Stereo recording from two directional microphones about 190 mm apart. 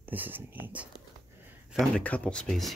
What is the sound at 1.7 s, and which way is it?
Speech, centre (ahead or behind).